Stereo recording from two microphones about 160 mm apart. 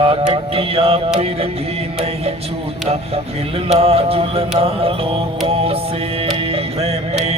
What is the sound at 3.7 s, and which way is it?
Music, 40° right (ahead or behind).